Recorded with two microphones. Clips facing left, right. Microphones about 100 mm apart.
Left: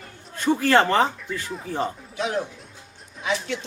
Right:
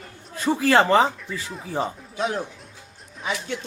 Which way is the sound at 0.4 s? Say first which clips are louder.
Even; 5° right (ahead or behind).